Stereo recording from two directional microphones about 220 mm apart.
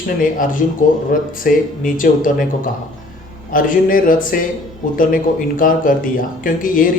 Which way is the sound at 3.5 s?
40° left (ahead or behind).